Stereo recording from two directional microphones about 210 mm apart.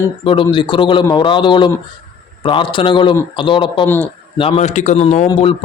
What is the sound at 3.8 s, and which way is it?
Speech, 10° left (ahead or behind).